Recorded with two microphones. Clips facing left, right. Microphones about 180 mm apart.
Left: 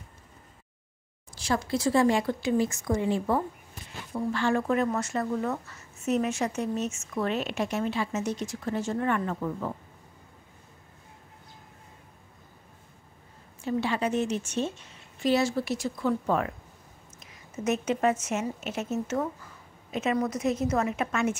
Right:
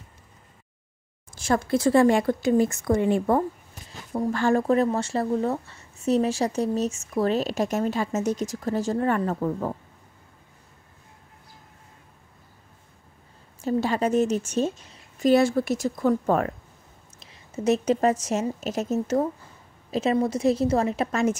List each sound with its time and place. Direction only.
1.3 s speech: 50° right (ahead or behind)
13.6 s speech: 40° right (ahead or behind)
17.2 s a woman's voice: 30° right (ahead or behind)